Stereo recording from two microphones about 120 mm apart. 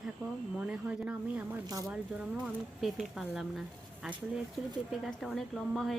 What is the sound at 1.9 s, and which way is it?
Speech, 5° right (ahead or behind).